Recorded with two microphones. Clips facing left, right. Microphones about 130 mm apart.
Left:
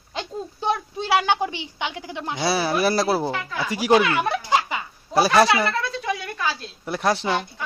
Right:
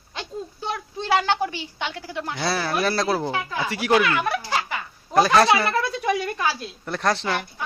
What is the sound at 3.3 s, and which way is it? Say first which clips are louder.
Speech: right 1 dB; 20° right (ahead or behind).